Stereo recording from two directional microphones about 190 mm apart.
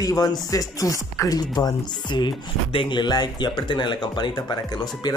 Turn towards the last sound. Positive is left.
turn(degrees=20)  # may be behind; listen again after turning